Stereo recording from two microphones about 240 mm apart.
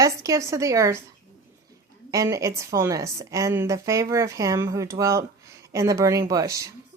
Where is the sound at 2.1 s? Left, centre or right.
Centre.